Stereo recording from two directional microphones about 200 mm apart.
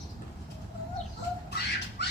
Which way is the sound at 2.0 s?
55° left (ahead or behind).